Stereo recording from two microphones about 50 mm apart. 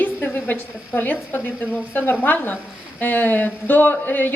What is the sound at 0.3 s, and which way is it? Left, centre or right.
A woman's voice, left.